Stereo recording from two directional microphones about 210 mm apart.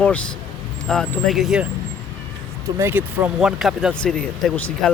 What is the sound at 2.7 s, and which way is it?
Speech, 10° right (ahead or behind).